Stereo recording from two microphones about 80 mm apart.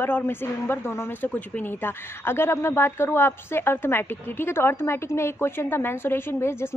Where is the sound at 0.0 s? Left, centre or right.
Left.